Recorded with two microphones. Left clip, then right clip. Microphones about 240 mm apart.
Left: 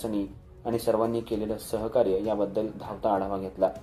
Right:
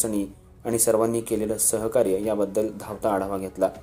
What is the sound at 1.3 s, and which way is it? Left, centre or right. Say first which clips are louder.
Speech: right 5 dB; right.